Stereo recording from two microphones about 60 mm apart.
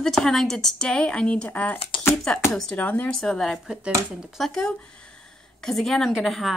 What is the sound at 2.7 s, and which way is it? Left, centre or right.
Speech, left.